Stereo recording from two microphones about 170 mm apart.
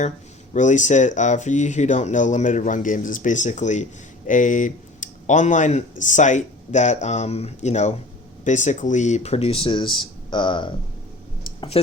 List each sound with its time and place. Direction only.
0.5 s speech: 45° left (ahead or behind); by 10.8 s 30° left (ahead or behind)